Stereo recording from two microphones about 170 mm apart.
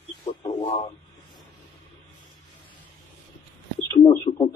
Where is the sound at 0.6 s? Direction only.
35° left (ahead or behind).